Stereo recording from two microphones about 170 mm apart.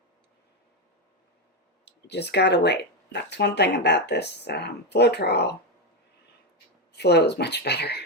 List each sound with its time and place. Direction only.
1.8 s speech: 75° left (ahead or behind)
6.9 s speech: 75° left (ahead or behind)